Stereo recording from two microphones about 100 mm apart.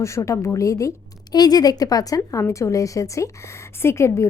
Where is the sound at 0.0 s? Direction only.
30° left (ahead or behind).